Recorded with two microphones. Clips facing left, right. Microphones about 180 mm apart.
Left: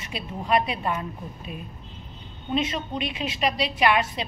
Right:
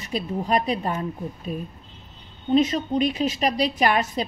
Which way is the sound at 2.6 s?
40° right (ahead or behind).